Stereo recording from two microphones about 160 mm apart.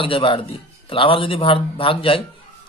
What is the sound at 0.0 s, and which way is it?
A man's voice, 35° left (ahead or behind).